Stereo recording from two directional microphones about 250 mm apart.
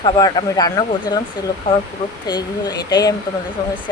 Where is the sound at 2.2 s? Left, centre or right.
Centre.